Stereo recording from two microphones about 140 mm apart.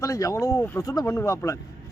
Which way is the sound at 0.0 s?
25° left (ahead or behind).